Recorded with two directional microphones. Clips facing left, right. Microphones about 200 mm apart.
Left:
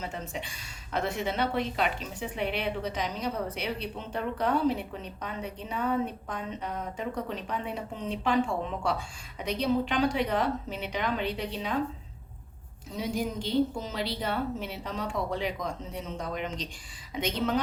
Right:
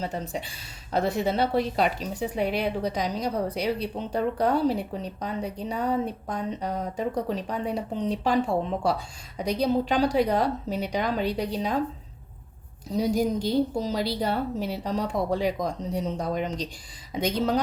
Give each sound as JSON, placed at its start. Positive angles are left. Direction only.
{"t": 0.0, "sound": "a woman's voice", "side_deg": -35}
{"t": 12.9, "sound": "a woman's voice", "side_deg": -40}